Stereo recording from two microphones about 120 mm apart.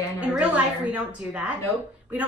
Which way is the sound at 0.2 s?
10° right (ahead or behind).